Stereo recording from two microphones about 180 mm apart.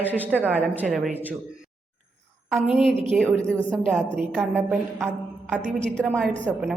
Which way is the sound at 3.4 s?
5° left (ahead or behind).